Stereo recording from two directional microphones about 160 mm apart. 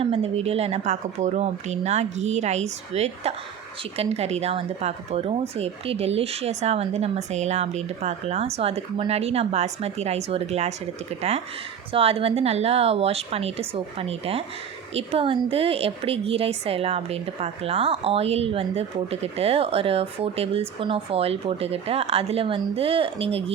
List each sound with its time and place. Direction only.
0.0 s a woman's voice: 35° right (ahead or behind)